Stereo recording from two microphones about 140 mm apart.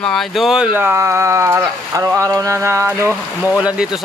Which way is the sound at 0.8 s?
15° right (ahead or behind).